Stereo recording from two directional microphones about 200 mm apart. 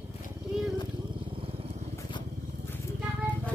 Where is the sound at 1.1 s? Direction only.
25° right (ahead or behind).